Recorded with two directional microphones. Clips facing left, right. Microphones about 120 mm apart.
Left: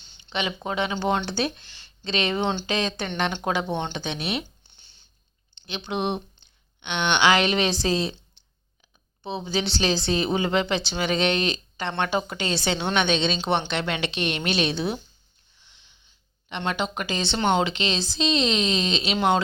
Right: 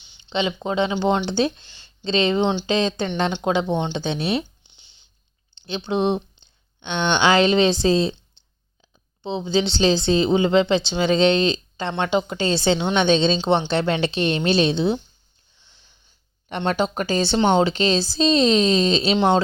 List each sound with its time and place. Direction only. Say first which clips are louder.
0.3 s a woman's voice: right 5 dB; 25° right (ahead or behind)
4.6 s a sound: even; 15° right (ahead or behind)
5.5 s speech: right 6 dB; 30° right (ahead or behind)
8.4 s clicking: right 1 dB; 30° right (ahead or behind)
9.2 s a woman's voice: right 6 dB; 25° right (ahead or behind)
15.5 s wheeze: right 1 dB; 30° right (ahead or behind)
16.5 s speech: right 5 dB; 35° right (ahead or behind)